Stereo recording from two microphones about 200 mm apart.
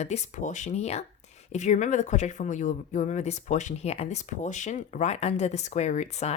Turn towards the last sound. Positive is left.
turn(degrees=35)  # may be behind; listen again after turning